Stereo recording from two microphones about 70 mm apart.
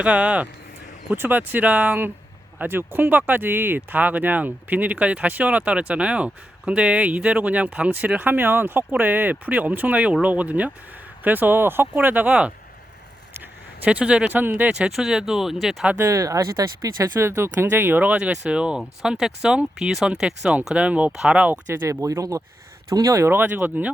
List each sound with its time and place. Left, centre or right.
0.0 s speech: centre
1.1 s speech: right
13.8 s speech: centre
14.7 s speech: centre
14.9 s speech: centre
16.0 s speech: right
17.2 s speech: right; by 20.5 s centre
20.7 s speech: right
21.8 s speech: right
23.2 s speech: right